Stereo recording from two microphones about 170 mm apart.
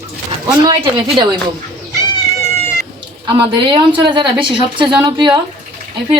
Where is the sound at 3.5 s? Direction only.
30° right (ahead or behind).